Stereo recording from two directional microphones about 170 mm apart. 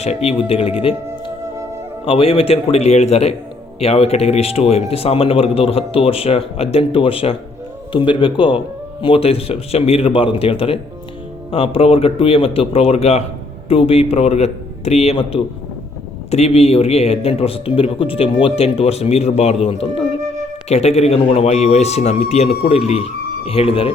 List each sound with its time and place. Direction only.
0.0 s a man's voice: 40° left (ahead or behind)
2.0 s a man's voice: 30° left (ahead or behind)